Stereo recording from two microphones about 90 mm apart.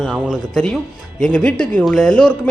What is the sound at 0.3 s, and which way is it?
Speech, 5° left (ahead or behind).